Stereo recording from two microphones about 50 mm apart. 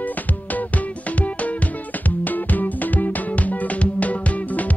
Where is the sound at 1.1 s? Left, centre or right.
Left.